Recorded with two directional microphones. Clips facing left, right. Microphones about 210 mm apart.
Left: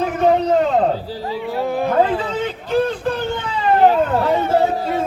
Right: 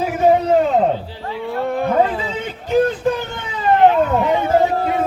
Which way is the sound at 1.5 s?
Centre (ahead or behind).